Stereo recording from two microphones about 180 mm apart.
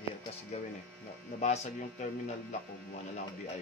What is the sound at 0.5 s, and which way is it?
Speech, 40° left (ahead or behind).